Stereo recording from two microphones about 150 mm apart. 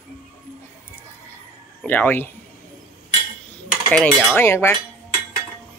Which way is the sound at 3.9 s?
5° left (ahead or behind).